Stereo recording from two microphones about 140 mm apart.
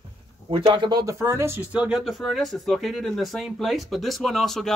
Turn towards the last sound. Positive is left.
turn(degrees=0)  # may be behind; listen again after turning